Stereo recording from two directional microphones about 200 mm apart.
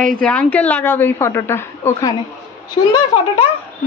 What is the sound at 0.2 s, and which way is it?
A woman's voice, 5° left (ahead or behind).